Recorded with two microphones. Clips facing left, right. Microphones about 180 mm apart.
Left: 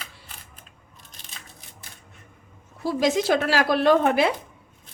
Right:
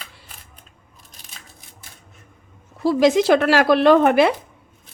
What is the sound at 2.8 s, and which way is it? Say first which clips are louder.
Speech: right 7 dB; 75° right (ahead or behind).